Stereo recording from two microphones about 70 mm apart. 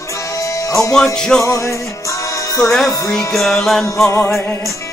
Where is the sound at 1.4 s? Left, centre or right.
Left.